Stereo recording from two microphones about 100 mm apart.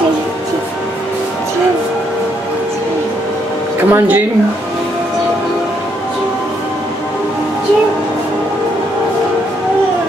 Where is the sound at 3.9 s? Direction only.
20° right (ahead or behind).